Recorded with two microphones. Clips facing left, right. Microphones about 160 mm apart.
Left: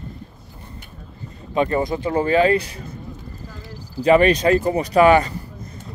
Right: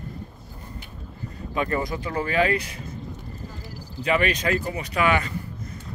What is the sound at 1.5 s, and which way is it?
Speech, 25° left (ahead or behind).